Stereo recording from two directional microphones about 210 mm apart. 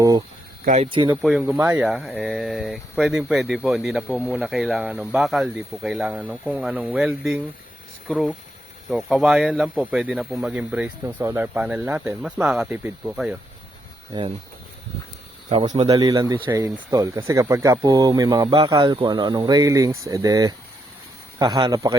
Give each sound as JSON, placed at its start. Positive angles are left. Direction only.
{"t": 0.6, "sound": "speech", "side_deg": -35}
{"t": 0.9, "sound": "speech", "side_deg": -25}
{"t": 1.1, "sound": "speech", "side_deg": 0}
{"t": 14.1, "sound": "speech", "side_deg": -20}
{"t": 15.6, "sound": "speech", "side_deg": -20}